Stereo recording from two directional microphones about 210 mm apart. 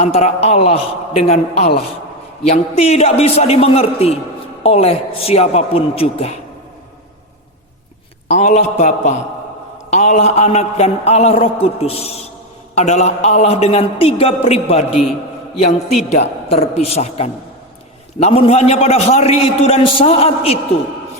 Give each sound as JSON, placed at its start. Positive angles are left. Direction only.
{"t": 0.0, "sound": "a man's voice", "side_deg": 30}
{"t": 8.3, "sound": "a man's voice", "side_deg": 30}
{"t": 16.0, "sound": "a man's voice", "side_deg": 30}